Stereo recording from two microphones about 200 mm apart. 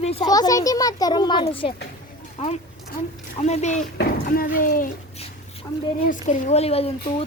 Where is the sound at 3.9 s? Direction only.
45° left (ahead or behind).